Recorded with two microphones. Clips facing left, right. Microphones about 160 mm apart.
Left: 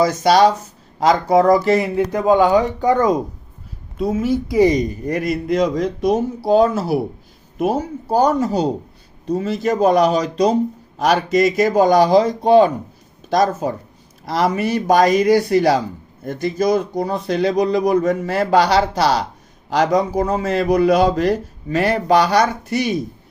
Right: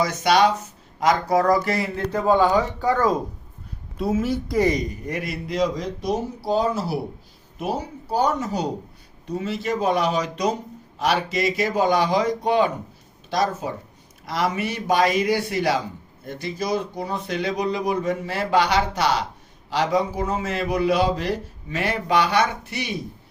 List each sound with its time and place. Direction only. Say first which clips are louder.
0.0 s a man's voice: left 5 dB; 35° left (ahead or behind); by 3.2 s 20° left (ahead or behind)
3.9 s a woman's voice: left 4 dB; centre (ahead or behind)
4.6 s speech: left 8 dB; 20° left (ahead or behind)
5.0 s a man's voice: left 9 dB; 40° left (ahead or behind)